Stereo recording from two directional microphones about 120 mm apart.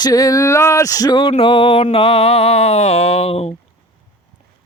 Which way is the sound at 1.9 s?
50° left (ahead or behind).